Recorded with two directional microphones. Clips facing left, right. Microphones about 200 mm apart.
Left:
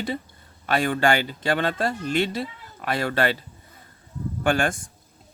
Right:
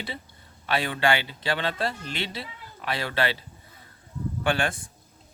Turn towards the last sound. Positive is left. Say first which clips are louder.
# left 4 dB
turn(degrees=45)  # may be behind; listen again after turning